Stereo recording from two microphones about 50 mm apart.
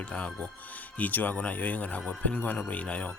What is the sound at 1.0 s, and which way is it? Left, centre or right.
Speech, left.